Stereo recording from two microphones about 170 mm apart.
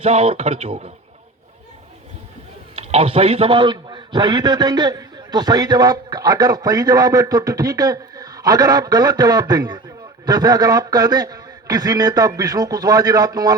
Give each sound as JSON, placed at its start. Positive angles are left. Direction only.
{"t": 0.0, "sound": "speech", "side_deg": -35}
{"t": 2.7, "sound": "a man's voice", "side_deg": -35}